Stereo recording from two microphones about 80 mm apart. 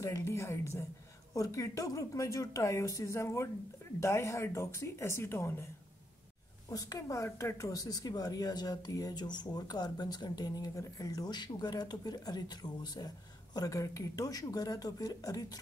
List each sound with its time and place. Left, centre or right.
0.2 s a woman's voice: left
6.7 s speech: left